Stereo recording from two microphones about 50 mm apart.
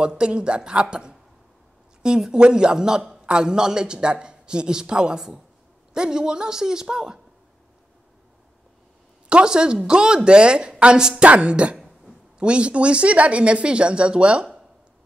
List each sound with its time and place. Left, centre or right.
0.0 s a man's voice: centre
9.3 s speech: centre